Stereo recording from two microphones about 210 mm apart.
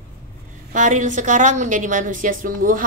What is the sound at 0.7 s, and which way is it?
A woman's voice, 35° right (ahead or behind).